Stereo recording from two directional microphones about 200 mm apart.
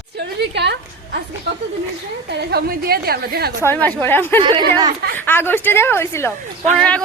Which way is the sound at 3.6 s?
10° left (ahead or behind).